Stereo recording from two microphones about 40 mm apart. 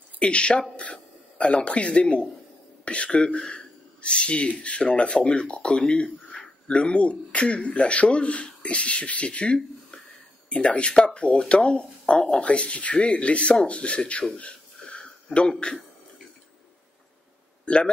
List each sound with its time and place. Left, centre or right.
0.2 s speech: left
14.3 s a sound: left
17.6 s a man's voice: left